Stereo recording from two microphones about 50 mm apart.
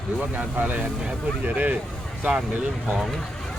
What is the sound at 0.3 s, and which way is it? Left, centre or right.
Speech, right.